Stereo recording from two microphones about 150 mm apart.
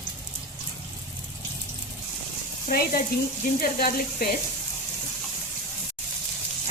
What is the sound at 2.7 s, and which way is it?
Speech, 85° left.